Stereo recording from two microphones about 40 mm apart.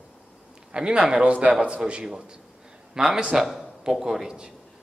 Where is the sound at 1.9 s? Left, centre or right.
Centre.